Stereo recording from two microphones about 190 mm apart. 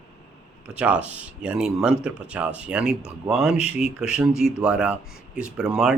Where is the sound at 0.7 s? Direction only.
5° right (ahead or behind).